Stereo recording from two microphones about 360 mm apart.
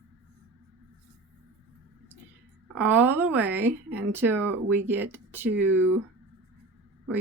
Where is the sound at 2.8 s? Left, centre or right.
Centre.